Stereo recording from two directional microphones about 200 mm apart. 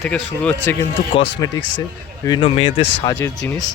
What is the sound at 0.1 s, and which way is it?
Speech, 5° left (ahead or behind).